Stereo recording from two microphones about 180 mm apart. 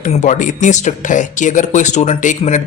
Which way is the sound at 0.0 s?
40° left (ahead or behind).